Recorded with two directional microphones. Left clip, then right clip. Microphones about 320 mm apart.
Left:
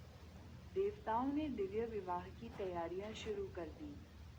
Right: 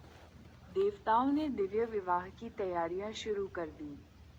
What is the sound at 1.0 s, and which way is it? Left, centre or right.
A woman's voice, centre.